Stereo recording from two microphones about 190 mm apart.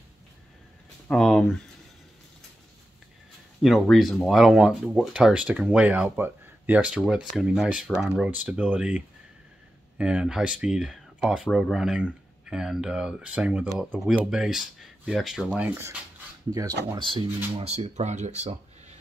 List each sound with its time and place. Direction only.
1.0 s speech: 5° left (ahead or behind)
3.6 s speech: centre (ahead or behind)
16.9 s speech: 25° right (ahead or behind)